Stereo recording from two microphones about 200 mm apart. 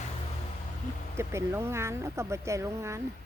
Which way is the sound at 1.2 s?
15° right (ahead or behind).